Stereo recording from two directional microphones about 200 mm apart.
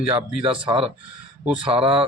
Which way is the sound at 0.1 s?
25° right (ahead or behind).